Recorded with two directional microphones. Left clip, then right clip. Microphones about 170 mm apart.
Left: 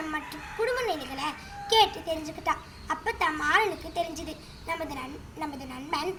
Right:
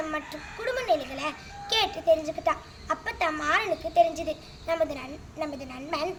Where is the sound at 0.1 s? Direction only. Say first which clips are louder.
Right 1 dB; 25° right (ahead or behind).